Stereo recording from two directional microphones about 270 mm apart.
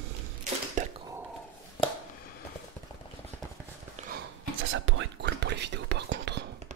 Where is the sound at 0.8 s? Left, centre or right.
Right.